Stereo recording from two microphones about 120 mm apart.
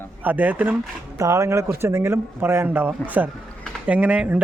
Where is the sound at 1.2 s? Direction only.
25° right (ahead or behind).